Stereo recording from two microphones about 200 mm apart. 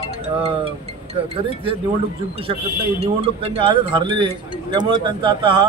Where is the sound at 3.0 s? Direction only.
30° right (ahead or behind).